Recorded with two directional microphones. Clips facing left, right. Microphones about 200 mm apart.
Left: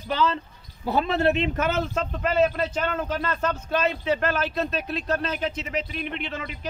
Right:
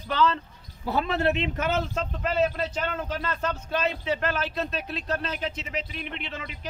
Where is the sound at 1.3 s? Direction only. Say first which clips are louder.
Left 2 dB; 45° left (ahead or behind).